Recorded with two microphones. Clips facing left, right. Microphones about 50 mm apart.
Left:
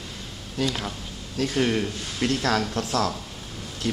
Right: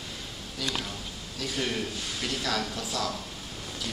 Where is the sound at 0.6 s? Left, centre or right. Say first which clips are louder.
Left 8 dB; left.